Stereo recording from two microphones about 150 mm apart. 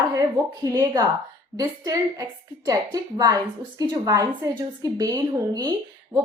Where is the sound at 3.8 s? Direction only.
25° right (ahead or behind).